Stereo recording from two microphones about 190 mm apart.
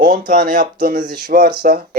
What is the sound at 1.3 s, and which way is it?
Speech, 55° right (ahead or behind).